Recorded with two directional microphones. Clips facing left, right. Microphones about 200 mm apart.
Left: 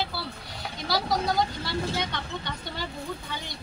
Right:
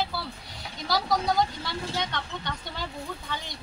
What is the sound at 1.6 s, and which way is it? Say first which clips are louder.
Speech: left 2 dB; 5° left (ahead or behind).